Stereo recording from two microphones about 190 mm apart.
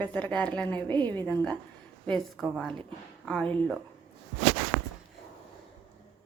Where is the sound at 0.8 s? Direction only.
25° right (ahead or behind).